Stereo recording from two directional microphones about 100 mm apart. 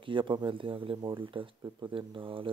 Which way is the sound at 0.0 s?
55° right (ahead or behind).